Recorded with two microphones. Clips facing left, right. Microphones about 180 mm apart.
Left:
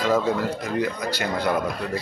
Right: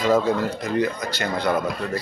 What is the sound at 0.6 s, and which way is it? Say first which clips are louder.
Speech: right 2 dB; 5° left (ahead or behind).